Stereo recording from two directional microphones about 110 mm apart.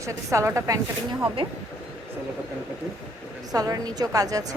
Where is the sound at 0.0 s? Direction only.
25° right (ahead or behind).